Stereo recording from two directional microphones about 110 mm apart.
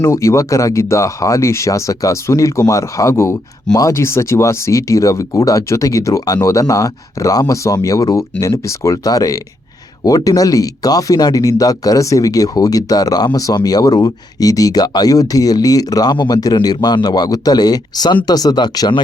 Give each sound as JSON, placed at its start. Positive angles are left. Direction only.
{"t": 0.0, "sound": "speech", "side_deg": 25}